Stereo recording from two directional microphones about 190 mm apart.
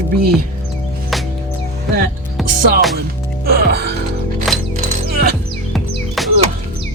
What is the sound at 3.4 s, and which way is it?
Speech, 55° right (ahead or behind).